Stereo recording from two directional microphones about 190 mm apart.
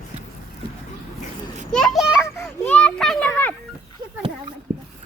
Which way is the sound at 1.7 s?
Centre (ahead or behind).